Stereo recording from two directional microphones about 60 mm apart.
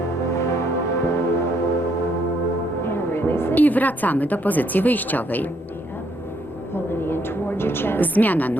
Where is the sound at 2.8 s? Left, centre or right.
Left.